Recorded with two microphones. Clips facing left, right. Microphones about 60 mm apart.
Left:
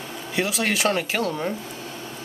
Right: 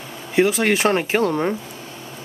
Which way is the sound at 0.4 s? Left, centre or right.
Right.